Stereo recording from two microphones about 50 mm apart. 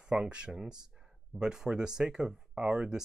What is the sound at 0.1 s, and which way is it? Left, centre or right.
Speech, right.